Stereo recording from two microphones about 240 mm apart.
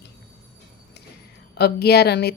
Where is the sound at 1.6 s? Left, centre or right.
Left.